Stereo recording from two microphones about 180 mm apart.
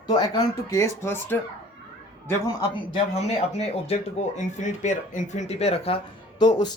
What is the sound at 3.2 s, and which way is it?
Speech, 35° left (ahead or behind).